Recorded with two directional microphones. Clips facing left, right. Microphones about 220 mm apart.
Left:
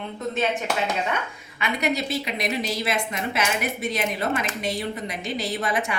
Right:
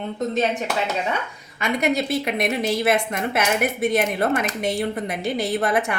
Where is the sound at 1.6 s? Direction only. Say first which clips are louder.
Right 4 dB; 50° right (ahead or behind).